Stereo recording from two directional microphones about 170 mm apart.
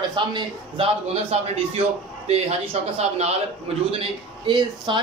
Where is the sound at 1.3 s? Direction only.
40° right (ahead or behind).